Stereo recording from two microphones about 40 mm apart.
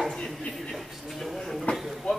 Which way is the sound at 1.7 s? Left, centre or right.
Left.